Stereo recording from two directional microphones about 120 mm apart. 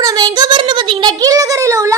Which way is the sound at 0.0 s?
30° right (ahead or behind).